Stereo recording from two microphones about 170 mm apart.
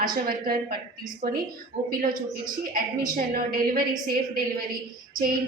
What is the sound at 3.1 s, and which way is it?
Speech, 60° right (ahead or behind).